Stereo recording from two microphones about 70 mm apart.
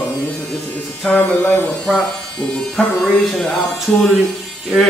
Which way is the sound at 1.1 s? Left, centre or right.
Left.